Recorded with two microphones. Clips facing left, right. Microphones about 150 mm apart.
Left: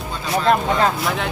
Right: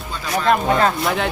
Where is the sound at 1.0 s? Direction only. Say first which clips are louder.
Right 2 dB; centre (ahead or behind).